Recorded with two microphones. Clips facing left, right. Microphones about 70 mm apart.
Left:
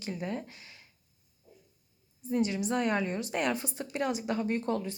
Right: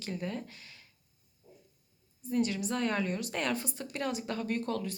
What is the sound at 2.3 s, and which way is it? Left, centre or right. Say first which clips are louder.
A woman's voice: left 2 dB; left.